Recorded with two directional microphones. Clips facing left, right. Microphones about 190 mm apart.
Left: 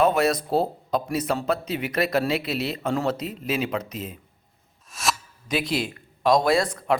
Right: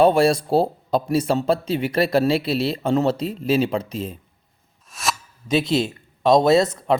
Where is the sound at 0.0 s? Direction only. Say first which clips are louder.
Right 5 dB; 30° right (ahead or behind).